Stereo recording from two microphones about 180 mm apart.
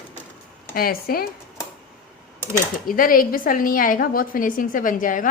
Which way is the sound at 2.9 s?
50° left (ahead or behind).